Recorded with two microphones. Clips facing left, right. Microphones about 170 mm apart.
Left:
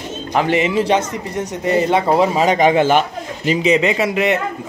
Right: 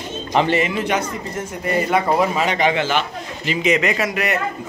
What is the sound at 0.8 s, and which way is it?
Speech, 30° left (ahead or behind).